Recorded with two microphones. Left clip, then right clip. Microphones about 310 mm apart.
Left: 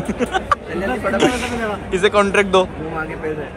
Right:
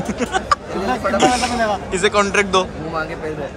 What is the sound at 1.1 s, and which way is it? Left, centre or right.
Speech, centre.